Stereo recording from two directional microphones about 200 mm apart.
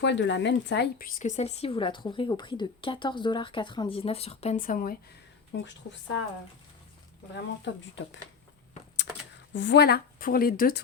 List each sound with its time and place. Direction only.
0.0 s speech: 60° left (ahead or behind); by 4.9 s 45° left (ahead or behind)
5.5 s speech: 65° left (ahead or behind)
7.3 s speech: 65° left (ahead or behind)
9.5 s a woman's voice: 65° left (ahead or behind); by 10.8 s 45° left (ahead or behind)